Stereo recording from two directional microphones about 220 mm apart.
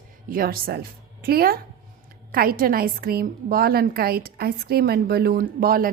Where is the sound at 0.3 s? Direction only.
40° right (ahead or behind).